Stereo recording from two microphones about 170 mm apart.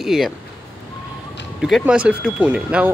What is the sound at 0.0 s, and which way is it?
Speech, centre (ahead or behind).